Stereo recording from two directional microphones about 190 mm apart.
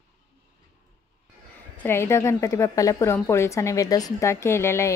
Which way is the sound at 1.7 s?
10° left (ahead or behind).